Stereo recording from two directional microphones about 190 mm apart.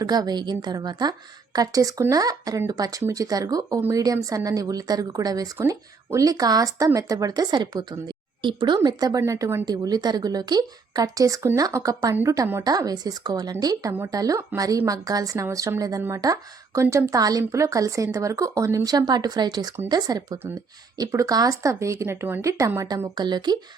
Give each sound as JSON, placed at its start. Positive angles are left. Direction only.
{"t": 0.0, "sound": "speech", "side_deg": -20}